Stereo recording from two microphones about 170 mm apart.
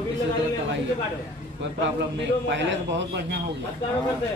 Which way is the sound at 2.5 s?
90° right.